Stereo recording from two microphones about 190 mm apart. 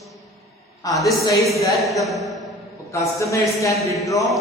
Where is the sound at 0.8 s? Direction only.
20° left (ahead or behind).